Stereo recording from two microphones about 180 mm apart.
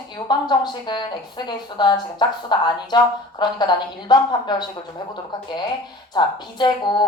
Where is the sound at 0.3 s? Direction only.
25° left (ahead or behind).